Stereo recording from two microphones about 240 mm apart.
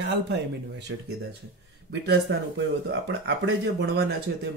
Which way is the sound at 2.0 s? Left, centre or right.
Right.